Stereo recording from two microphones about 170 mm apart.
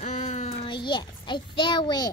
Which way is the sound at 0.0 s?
45° left (ahead or behind).